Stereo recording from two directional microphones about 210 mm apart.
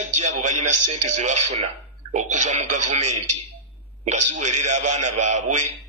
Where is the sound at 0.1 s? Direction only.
35° right (ahead or behind).